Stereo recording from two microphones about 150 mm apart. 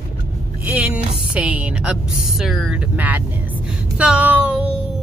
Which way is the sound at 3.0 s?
10° right (ahead or behind).